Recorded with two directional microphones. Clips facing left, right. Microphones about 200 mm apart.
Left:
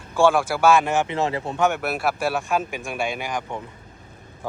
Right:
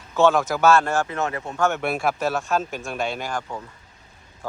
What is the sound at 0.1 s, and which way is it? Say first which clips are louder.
Speech: even; 10° left (ahead or behind).